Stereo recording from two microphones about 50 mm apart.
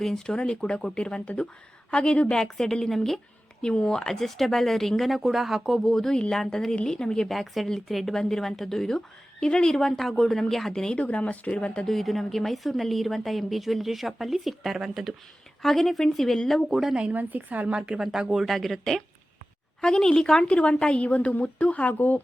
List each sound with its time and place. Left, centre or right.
0.0 s a woman's voice: centre
7.3 s speech: centre
10.9 s a woman's voice: left
11.9 s speech: centre
16.9 s speech: right
17.2 s a woman's voice: right
17.7 s speech: centre
18.4 s a woman's voice: centre; by 22.2 s left